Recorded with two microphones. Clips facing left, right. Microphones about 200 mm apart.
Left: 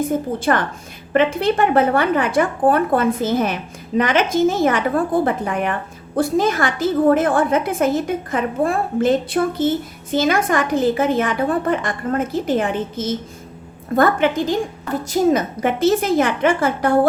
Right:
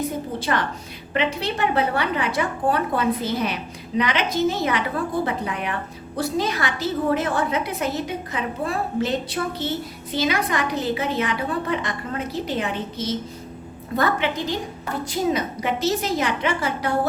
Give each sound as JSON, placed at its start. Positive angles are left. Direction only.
{"t": 0.0, "sound": "a woman's voice", "side_deg": 50}